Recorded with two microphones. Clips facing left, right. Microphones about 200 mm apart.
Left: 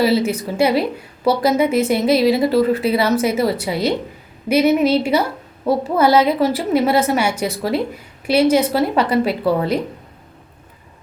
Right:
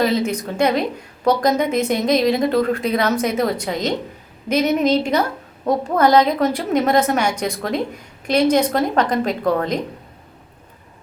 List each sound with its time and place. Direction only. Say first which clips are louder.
0.0 s a woman's voice: left 2 dB; 5° left (ahead or behind)